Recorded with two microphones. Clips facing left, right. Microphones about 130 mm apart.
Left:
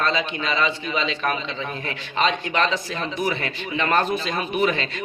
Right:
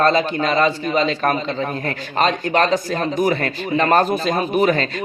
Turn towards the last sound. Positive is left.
turn(degrees=-40)  # may be behind; listen again after turning